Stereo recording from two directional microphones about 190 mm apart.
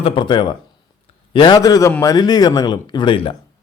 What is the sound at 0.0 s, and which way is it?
Speech, 25° left (ahead or behind).